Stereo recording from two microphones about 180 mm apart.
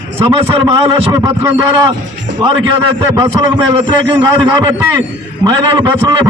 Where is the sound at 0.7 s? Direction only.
25° right (ahead or behind).